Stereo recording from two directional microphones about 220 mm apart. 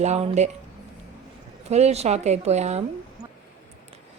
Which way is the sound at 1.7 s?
30° right (ahead or behind).